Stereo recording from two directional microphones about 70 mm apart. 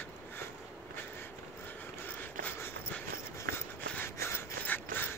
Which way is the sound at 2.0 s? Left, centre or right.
Left.